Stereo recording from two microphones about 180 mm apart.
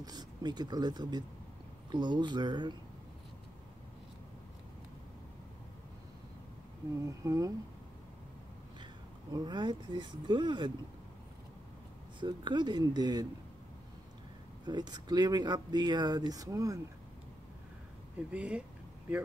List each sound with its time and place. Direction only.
0.0 s speech: 20° right (ahead or behind)
7.1 s speech: 20° right (ahead or behind)
9.3 s speech: 25° right (ahead or behind)
12.2 s speech: 25° right (ahead or behind)
14.7 s speech: 25° right (ahead or behind)
18.3 s speech: 5° right (ahead or behind)